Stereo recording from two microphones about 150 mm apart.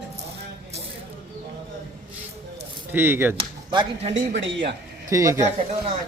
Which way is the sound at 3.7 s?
30° right (ahead or behind).